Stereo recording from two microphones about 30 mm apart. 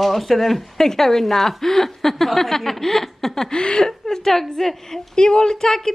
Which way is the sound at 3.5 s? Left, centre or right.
Left.